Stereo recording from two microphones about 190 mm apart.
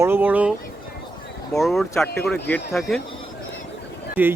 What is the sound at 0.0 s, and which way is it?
Speech, 10° right (ahead or behind).